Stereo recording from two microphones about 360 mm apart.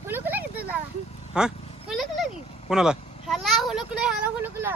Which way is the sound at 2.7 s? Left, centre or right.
Centre.